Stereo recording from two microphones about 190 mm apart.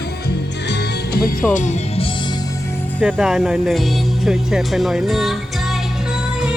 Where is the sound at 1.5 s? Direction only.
40° left (ahead or behind).